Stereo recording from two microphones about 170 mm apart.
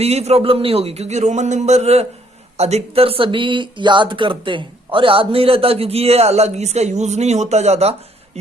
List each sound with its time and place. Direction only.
0.0 s speech: 40° right (ahead or behind)